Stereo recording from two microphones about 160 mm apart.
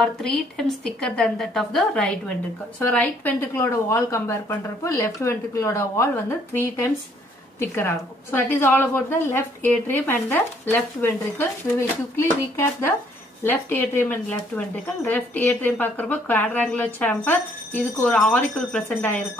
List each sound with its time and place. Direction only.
0.0 s a woman's voice: 5° left (ahead or behind)